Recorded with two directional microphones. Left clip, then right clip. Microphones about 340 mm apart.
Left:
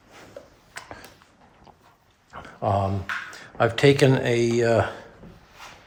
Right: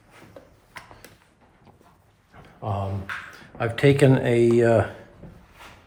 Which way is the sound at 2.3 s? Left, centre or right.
Left.